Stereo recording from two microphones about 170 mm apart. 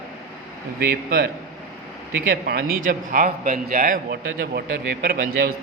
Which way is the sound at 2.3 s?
65° right (ahead or behind).